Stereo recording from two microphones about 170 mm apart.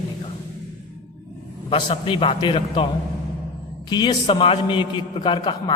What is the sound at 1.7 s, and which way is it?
A man's voice, 30° left (ahead or behind).